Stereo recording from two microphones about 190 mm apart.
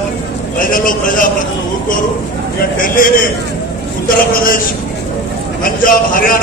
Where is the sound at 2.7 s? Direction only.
45° left (ahead or behind).